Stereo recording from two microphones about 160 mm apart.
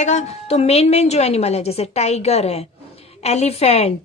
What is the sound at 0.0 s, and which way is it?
A woman's voice, 45° left (ahead or behind).